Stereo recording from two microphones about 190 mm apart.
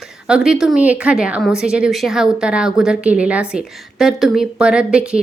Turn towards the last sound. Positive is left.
turn(degrees=-5)  # may be behind; listen again after turning